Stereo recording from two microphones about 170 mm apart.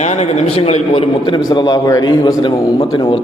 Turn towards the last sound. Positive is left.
turn(degrees=30)  # may be behind; listen again after turning